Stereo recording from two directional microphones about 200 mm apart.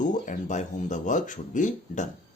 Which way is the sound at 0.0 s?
40° left (ahead or behind).